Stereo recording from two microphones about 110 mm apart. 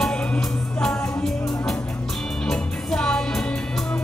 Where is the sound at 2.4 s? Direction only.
5° left (ahead or behind).